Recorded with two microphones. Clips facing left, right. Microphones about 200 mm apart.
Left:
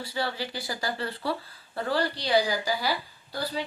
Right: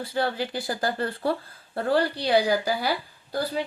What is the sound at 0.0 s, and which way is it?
Speech, 50° right (ahead or behind).